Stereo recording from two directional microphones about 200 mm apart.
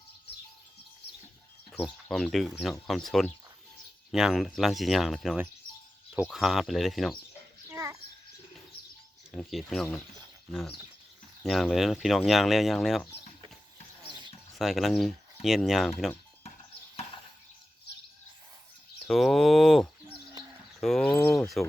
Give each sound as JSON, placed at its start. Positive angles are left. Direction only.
{"t": 1.8, "sound": "speech", "side_deg": 0}
{"t": 7.7, "sound": "a sound", "side_deg": -15}
{"t": 9.3, "sound": "speech", "side_deg": 0}
{"t": 14.5, "sound": "speech", "side_deg": 0}
{"t": 19.0, "sound": "speech", "side_deg": 0}